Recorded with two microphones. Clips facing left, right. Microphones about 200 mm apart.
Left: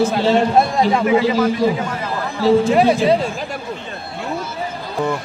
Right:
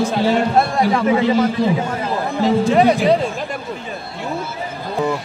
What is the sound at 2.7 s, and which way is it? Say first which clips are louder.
Speech: even; centre (ahead or behind).